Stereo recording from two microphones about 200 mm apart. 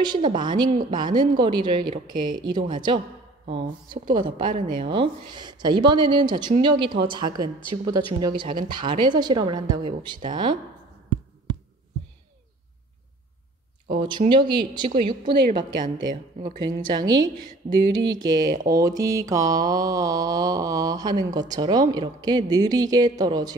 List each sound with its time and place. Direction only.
0.0 s mantra: 25° right (ahead or behind)
13.9 s mantra: 20° right (ahead or behind)
14.9 s a woman's voice: 40° right (ahead or behind)
15.5 s mantra: 20° right (ahead or behind)